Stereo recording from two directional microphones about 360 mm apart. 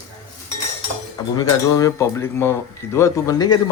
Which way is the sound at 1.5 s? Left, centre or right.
Centre.